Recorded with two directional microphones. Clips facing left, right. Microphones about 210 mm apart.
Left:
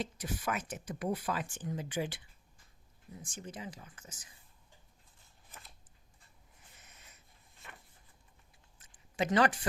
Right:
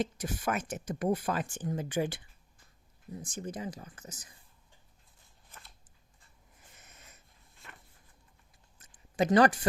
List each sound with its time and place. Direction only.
0.0 s speech: 45° right (ahead or behind)
3.2 s speech: 40° right (ahead or behind)
8.8 s a sound: 40° right (ahead or behind)